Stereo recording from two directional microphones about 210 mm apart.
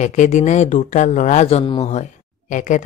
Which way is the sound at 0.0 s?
35° left (ahead or behind).